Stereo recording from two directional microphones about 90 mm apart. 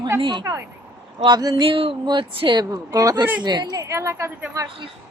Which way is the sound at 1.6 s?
85° right.